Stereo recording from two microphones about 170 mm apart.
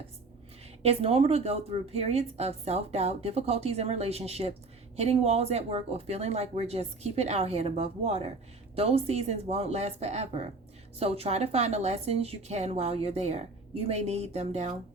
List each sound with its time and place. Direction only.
0.8 s a woman's voice: 35° right (ahead or behind)